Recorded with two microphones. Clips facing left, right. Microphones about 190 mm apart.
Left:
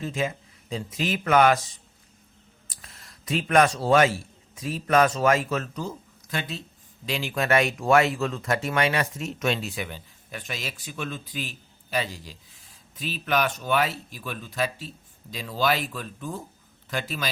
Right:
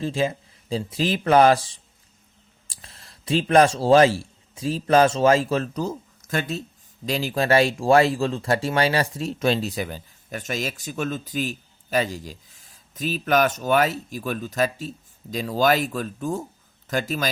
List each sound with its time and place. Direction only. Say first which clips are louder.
0.0 s a man's voice: right 5 dB; 30° right (ahead or behind)